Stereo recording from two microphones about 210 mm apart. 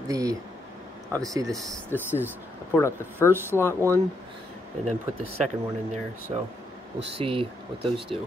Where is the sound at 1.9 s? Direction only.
10° right (ahead or behind).